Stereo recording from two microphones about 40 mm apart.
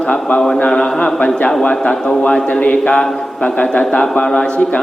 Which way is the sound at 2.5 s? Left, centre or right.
Left.